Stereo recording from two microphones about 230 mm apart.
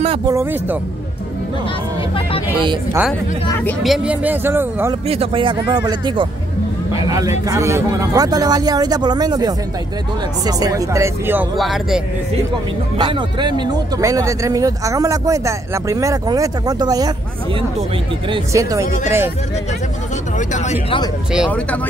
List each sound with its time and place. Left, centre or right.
0.3 s speech: centre
2.6 s speech: centre
3.5 s speech: centre
5.0 s speech: right; by 12.0 s centre
12.9 s speech: right
18.3 s speech: centre
20.3 s speech: left
21.3 s speech: centre